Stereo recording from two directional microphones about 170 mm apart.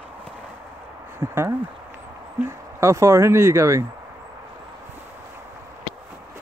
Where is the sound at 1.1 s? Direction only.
15° right (ahead or behind).